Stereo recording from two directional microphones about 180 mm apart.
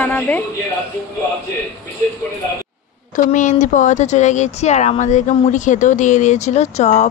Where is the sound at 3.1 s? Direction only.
45° left (ahead or behind).